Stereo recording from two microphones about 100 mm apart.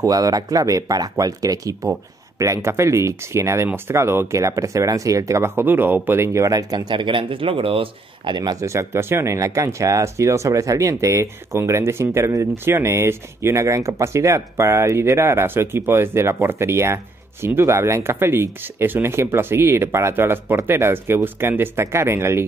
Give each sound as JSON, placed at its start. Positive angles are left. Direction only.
{"t": 0.0, "sound": "speech", "side_deg": -35}
{"t": 8.4, "sound": "speech", "side_deg": -40}
{"t": 8.6, "sound": "speech", "side_deg": -30}